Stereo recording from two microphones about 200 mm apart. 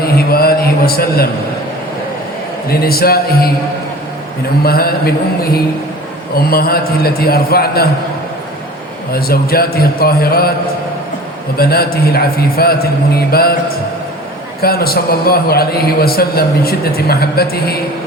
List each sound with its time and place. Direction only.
0.0 s a sound: 50° left (ahead or behind)
2.6 s a man's voice: 50° left (ahead or behind)
4.6 s a man's voice: 50° left (ahead or behind)
9.1 s a man's voice: 50° left (ahead or behind)
11.5 s a man's voice: 50° left (ahead or behind)
14.6 s a man's voice: 50° left (ahead or behind)